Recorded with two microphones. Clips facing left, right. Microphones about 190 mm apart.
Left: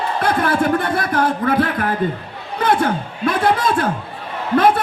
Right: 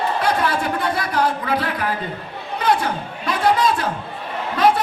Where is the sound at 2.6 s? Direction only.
50° left (ahead or behind).